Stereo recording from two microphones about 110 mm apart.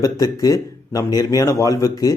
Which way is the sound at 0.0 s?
35° left (ahead or behind).